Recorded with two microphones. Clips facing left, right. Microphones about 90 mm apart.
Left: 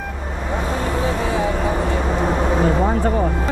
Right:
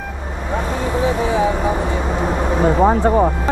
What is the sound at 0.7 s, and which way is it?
Vehicle, 20° right (ahead or behind).